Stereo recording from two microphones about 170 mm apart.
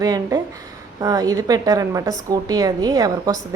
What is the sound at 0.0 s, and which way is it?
A woman's voice, 20° right (ahead or behind).